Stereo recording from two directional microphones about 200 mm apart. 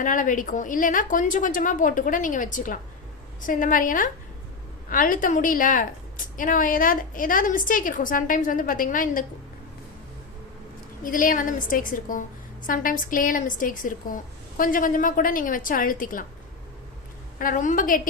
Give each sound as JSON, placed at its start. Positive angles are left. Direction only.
{"t": 0.0, "sound": "a woman's voice", "side_deg": 40}
{"t": 11.0, "sound": "a woman's voice", "side_deg": 45}
{"t": 17.3, "sound": "a woman's voice", "side_deg": 45}